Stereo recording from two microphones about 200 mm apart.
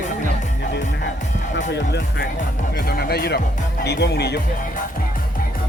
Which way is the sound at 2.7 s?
50° left (ahead or behind).